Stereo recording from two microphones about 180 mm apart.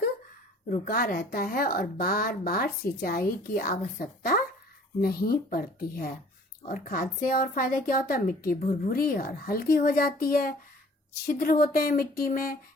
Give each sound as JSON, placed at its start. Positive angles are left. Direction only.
{"t": 0.9, "sound": "a woman's voice", "side_deg": 55}